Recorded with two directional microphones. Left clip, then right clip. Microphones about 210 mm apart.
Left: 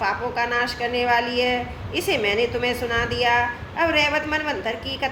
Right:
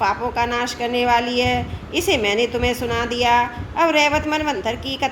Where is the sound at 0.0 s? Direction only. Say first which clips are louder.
Right 3 dB; 50° right (ahead or behind).